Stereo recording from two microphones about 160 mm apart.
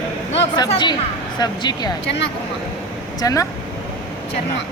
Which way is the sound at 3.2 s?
20° left (ahead or behind).